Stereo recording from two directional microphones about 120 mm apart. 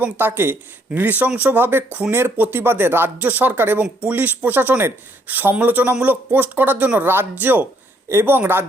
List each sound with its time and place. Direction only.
0.0 s speech: 15° right (ahead or behind)